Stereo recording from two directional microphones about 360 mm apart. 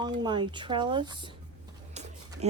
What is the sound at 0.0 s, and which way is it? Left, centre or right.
Speech, centre.